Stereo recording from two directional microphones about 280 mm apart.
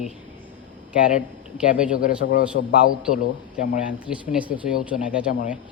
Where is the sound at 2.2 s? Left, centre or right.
Left.